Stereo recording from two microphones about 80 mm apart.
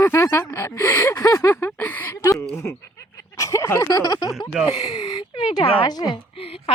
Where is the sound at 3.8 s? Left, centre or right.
Left.